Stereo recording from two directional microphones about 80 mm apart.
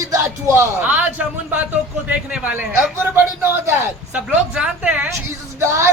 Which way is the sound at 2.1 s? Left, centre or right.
Centre.